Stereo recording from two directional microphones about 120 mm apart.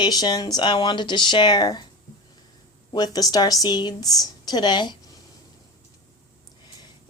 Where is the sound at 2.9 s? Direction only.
30° left (ahead or behind).